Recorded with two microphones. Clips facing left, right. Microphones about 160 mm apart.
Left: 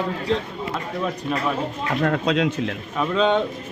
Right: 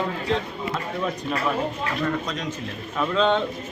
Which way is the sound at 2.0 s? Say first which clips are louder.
Left 8 dB; 70° left (ahead or behind).